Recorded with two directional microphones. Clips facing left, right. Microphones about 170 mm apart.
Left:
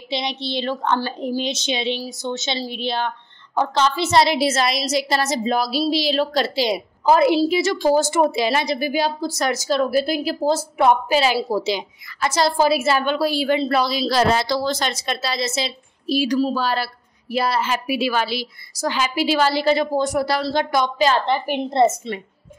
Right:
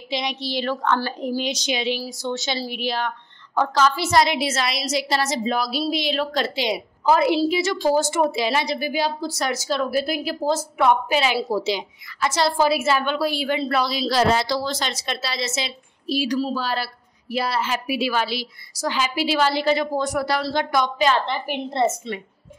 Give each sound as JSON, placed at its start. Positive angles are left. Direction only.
{"t": 0.1, "sound": "a woman's voice", "side_deg": 30}
{"t": 16.2, "sound": "a woman's voice", "side_deg": 50}